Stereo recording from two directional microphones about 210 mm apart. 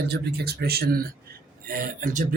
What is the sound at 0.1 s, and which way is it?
Speech, 50° right (ahead or behind).